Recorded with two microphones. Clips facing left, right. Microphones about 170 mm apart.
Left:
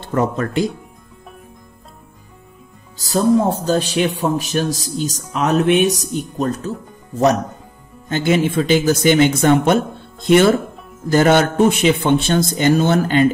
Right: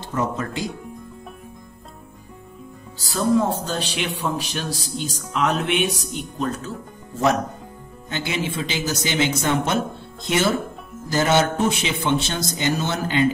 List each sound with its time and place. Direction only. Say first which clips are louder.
0.0 s speech: left 6 dB; 60° left (ahead or behind)
3.1 s speech: left 5 dB; 45° left (ahead or behind)
8.1 s speech: left 10 dB; 50° left (ahead or behind)